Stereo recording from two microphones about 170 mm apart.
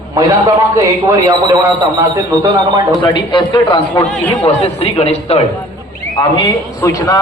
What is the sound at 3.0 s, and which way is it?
A man's voice, 30° left (ahead or behind).